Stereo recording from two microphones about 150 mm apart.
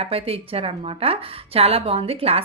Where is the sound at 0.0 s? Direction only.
40° right (ahead or behind).